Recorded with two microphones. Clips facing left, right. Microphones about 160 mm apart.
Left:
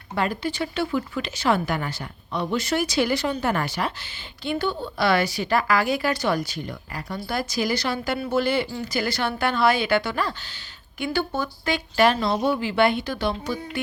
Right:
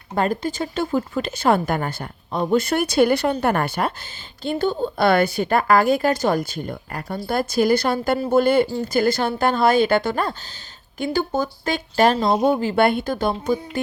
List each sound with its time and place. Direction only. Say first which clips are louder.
0.2 s a woman's voice: right 3 dB; 45° right (ahead or behind)